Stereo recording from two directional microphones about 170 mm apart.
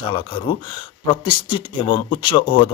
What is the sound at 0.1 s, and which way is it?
Speech, 30° left (ahead or behind).